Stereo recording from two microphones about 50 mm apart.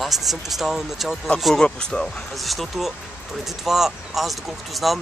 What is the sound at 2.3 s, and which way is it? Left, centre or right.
Speech, centre.